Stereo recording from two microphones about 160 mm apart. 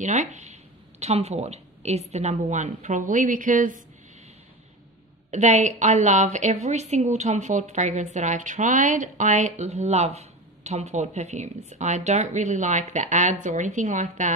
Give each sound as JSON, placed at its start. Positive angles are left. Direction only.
{"t": 0.0, "sound": "speech", "side_deg": -50}
{"t": 5.3, "sound": "a woman's voice", "side_deg": -45}